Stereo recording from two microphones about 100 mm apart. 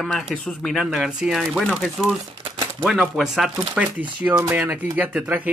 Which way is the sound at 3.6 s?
15° right (ahead or behind).